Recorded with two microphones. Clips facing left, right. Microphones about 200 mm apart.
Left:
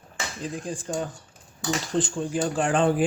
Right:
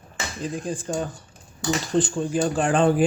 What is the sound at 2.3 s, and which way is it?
Speech, 45° right (ahead or behind).